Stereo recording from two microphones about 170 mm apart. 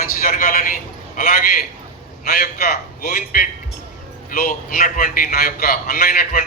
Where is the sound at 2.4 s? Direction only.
60° left (ahead or behind).